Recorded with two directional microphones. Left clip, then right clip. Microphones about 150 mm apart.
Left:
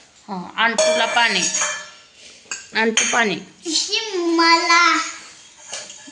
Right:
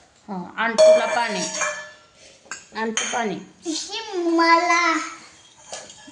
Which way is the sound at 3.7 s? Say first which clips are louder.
Left 7 dB; 85° right.